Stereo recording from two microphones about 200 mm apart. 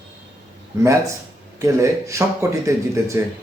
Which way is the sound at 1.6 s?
15° right (ahead or behind).